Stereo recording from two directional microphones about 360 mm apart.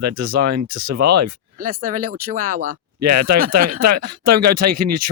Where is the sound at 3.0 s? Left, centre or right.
Right.